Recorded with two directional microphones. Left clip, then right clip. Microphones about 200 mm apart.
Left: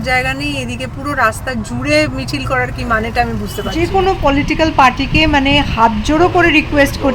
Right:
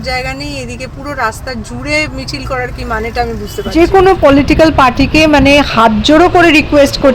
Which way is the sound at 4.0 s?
20° right (ahead or behind).